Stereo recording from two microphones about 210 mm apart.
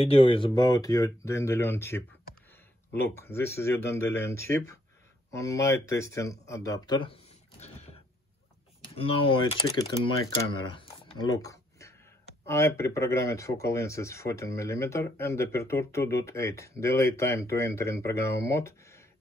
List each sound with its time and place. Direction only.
0.0 s speech: 25° left (ahead or behind)
8.9 s speech: 25° left (ahead or behind)
10.5 s a sound: 20° left (ahead or behind)
12.4 s speech: 15° left (ahead or behind)